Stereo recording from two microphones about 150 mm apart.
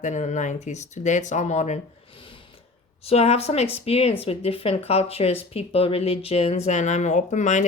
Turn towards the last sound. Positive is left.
turn(degrees=55)  # may be behind; listen again after turning